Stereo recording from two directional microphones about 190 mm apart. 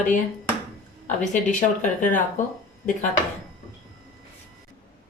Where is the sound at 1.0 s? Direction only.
40° left (ahead or behind).